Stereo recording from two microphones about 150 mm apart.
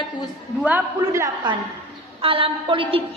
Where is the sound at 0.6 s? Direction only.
15° right (ahead or behind).